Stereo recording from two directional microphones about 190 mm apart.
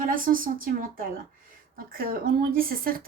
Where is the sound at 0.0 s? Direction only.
45° right (ahead or behind).